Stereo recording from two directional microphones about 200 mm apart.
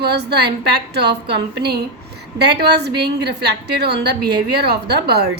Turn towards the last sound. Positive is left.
turn(degrees=-55)  # may be behind; listen again after turning